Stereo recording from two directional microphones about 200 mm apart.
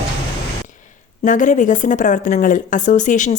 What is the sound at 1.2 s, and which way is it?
Speech, 40° left (ahead or behind).